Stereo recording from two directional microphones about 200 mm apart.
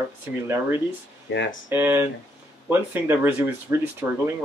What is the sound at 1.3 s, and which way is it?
Speech, 65° left (ahead or behind).